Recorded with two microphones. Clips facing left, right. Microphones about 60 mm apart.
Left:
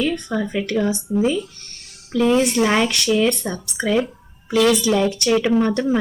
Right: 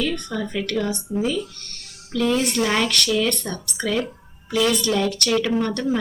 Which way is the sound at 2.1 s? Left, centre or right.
Centre.